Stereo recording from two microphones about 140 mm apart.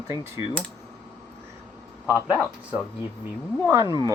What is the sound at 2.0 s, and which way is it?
Speech, 10° right (ahead or behind).